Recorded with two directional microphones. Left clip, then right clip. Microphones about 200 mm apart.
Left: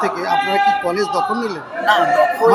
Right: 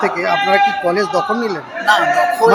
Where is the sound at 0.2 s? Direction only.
25° right (ahead or behind).